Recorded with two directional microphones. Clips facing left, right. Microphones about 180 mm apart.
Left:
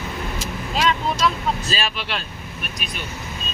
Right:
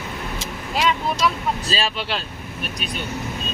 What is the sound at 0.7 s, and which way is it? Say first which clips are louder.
Speech: even; 10° right (ahead or behind).